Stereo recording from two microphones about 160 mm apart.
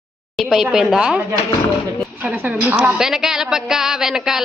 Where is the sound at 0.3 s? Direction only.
Centre (ahead or behind).